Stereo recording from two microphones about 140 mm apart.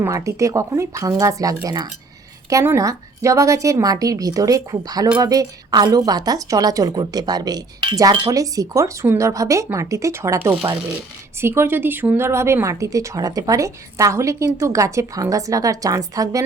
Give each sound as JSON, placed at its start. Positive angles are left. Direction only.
{"t": 0.0, "sound": "a woman's voice", "side_deg": -20}